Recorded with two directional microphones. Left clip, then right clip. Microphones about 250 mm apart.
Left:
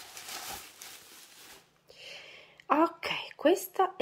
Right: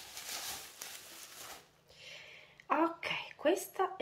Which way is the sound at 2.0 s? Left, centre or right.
Centre.